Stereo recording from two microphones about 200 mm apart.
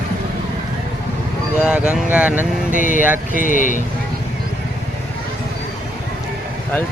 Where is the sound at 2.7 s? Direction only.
40° left (ahead or behind).